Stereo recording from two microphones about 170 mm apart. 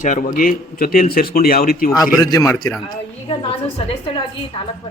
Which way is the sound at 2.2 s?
20° left (ahead or behind).